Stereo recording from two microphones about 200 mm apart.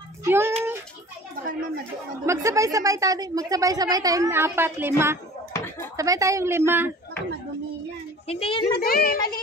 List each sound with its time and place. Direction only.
0.2 s a sound: 10° right (ahead or behind)
2.2 s a woman's voice: 15° right (ahead or behind)
8.3 s a child's voice: 30° left (ahead or behind)
8.6 s a child's voice: 50° left (ahead or behind)